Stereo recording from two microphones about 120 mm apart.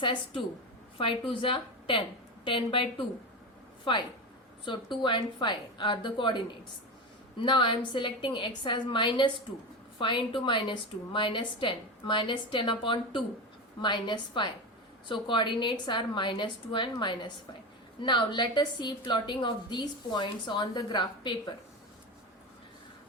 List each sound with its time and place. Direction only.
0.0 s a woman's voice: 45° left (ahead or behind)
4.6 s a woman's voice: 40° left (ahead or behind)